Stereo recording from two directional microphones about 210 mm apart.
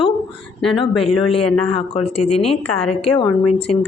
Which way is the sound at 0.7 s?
25° left (ahead or behind).